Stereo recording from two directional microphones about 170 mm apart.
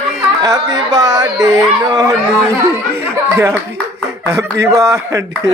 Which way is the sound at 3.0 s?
15° right (ahead or behind).